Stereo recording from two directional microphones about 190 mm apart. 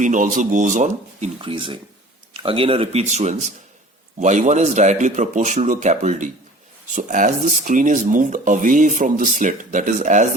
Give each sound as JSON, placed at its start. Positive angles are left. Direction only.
{"t": 0.0, "sound": "speech", "side_deg": -45}
{"t": 1.4, "sound": "speech", "side_deg": -25}